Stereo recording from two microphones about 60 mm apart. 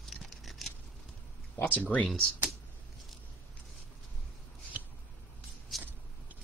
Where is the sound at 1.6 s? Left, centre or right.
Left.